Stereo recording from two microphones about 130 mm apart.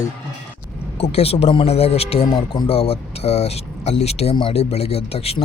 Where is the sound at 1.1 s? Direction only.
50° left (ahead or behind).